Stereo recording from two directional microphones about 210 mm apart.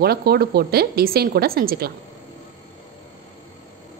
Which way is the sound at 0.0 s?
45° right (ahead or behind).